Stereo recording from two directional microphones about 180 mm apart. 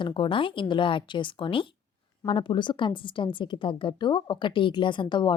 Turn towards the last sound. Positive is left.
turn(degrees=25)  # may be behind; listen again after turning